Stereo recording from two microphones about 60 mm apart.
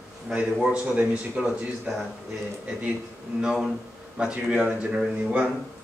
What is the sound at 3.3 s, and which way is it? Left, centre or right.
A man's voice, centre.